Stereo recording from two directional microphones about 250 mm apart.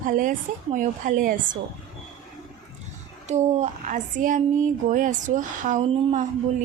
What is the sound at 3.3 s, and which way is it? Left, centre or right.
A woman's voice, right.